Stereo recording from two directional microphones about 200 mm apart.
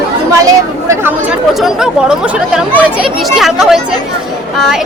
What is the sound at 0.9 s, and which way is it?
Speech, 10° right (ahead or behind).